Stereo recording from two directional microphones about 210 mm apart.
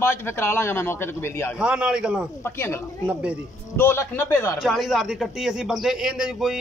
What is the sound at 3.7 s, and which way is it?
Speech, 10° left (ahead or behind).